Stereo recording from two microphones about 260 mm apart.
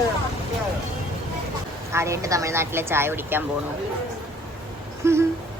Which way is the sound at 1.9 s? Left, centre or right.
Centre.